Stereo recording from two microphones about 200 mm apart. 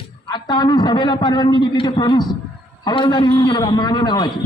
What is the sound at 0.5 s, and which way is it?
A man's voice, 20° left (ahead or behind).